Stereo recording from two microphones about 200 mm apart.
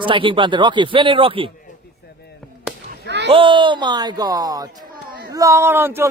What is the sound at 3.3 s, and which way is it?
A man's voice, 25° right (ahead or behind).